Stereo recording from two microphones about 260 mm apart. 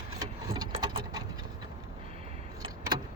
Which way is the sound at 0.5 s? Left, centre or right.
Centre.